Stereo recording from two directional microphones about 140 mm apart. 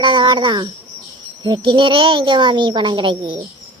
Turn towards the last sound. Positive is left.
turn(degrees=-35)  # may be behind; listen again after turning